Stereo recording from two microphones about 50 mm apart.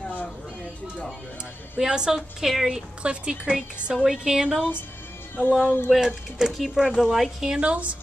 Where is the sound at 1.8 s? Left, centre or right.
Centre.